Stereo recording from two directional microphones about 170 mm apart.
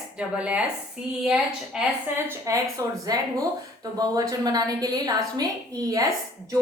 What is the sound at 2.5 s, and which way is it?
A woman's voice, 20° right (ahead or behind).